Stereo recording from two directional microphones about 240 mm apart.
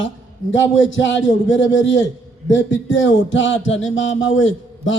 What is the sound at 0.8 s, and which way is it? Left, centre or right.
Speech, left.